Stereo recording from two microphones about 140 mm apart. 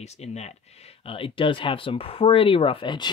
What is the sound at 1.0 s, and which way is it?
Speech, 40° left (ahead or behind).